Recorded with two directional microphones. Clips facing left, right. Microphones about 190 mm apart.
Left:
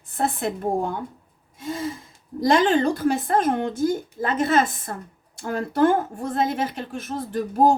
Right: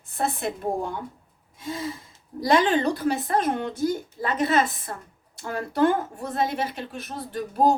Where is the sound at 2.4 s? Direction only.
45° left (ahead or behind).